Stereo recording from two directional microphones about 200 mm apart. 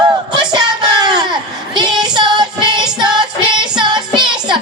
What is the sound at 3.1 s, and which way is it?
Child singing, 25° right (ahead or behind).